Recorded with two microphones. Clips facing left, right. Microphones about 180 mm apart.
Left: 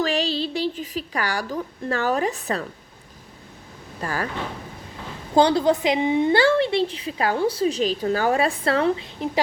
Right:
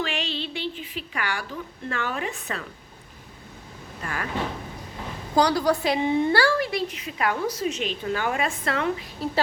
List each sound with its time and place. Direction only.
0.0 s a woman's voice: 35° left (ahead or behind)
4.0 s a woman's voice: 35° left (ahead or behind)
5.3 s a woman's voice: 25° left (ahead or behind)